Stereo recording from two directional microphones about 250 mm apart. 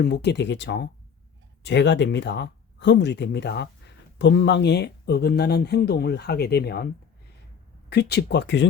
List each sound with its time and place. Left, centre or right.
0.0 s speech: left
7.9 s speech: left